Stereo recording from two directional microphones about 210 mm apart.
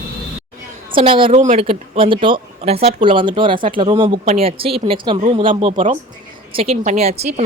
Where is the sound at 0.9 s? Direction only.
25° right (ahead or behind).